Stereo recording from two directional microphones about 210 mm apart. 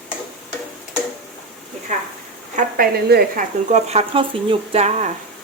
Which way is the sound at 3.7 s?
35° right (ahead or behind).